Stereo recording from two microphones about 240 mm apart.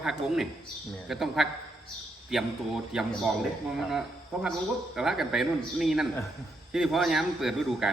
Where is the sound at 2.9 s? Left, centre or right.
Centre.